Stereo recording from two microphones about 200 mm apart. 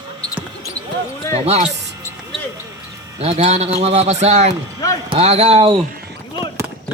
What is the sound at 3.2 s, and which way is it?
A man's voice, 35° right (ahead or behind).